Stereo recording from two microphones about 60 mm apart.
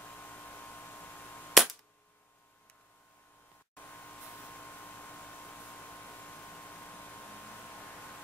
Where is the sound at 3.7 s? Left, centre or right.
Left.